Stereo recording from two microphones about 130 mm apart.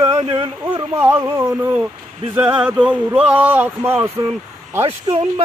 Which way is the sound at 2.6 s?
10° right (ahead or behind).